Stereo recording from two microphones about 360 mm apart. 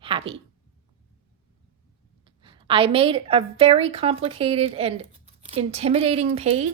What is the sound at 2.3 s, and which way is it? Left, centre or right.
A woman's voice, centre.